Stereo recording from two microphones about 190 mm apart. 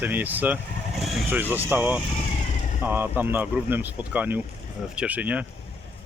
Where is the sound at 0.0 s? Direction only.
10° right (ahead or behind).